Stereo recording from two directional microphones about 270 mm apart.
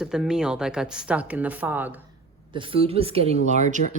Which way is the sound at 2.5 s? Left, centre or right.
Centre.